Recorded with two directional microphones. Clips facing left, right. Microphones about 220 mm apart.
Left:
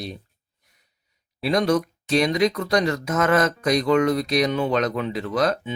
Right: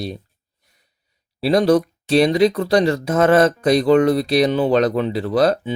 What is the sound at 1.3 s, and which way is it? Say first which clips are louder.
Speech: right 6 dB; 30° right (ahead or behind).